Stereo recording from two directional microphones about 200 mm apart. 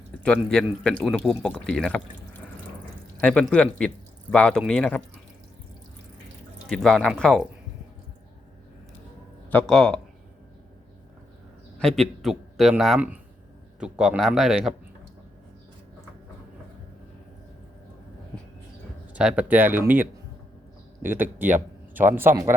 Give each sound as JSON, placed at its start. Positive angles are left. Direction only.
{"t": 0.3, "sound": "speech", "side_deg": 5}
{"t": 3.2, "sound": "speech", "side_deg": 5}
{"t": 6.7, "sound": "speech", "side_deg": 5}
{"t": 9.5, "sound": "speech", "side_deg": 5}
{"t": 11.8, "sound": "a man's voice", "side_deg": 0}
{"t": 19.1, "sound": "a man's voice", "side_deg": -5}